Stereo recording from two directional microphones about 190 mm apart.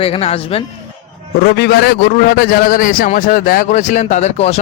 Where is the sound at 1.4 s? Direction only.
55° left (ahead or behind).